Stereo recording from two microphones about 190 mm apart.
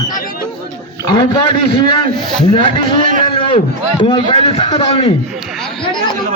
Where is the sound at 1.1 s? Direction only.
25° left (ahead or behind).